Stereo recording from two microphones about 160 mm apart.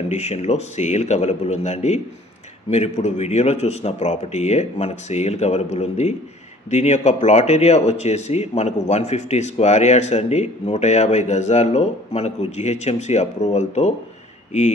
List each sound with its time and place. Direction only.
0.1 s speech: 45° left (ahead or behind)